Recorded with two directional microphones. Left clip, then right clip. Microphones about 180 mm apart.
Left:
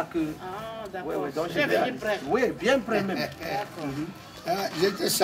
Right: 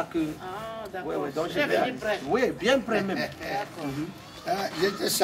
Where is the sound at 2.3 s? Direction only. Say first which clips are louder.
Even; 5° right (ahead or behind).